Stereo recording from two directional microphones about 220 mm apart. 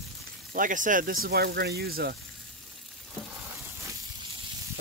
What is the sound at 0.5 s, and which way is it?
Speech, 40° right (ahead or behind).